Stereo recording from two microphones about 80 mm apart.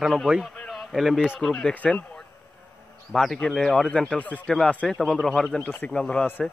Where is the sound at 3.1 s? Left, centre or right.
Centre.